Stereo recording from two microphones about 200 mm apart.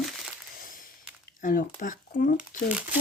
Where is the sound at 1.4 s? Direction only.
45° left (ahead or behind).